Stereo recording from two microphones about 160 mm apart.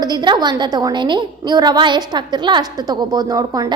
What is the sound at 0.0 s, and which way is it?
A woman's voice, 25° right (ahead or behind).